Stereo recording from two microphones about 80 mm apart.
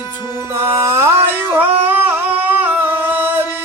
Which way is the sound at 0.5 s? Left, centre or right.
Right.